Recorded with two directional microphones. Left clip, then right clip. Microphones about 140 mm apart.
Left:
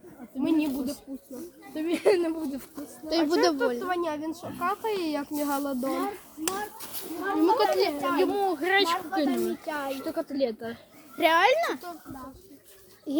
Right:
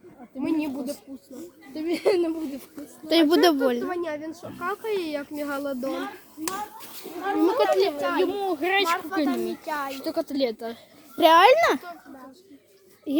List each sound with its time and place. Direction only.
0.3 s a sound: 10° left (ahead or behind)
1.3 s speech: centre (ahead or behind)
3.1 s a child's voice: 60° right (ahead or behind)
3.8 s speech: 5° left (ahead or behind)
7.3 s speech: 15° right (ahead or behind)
11.2 s a child's voice: 55° right (ahead or behind); by 11.8 s 85° right